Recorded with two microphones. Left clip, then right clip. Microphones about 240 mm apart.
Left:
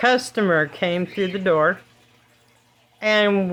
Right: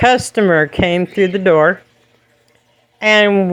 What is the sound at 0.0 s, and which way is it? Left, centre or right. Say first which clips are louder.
Speech: right 7 dB; right.